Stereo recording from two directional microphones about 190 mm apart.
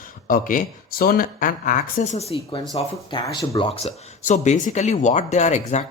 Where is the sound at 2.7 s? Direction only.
20° left (ahead or behind).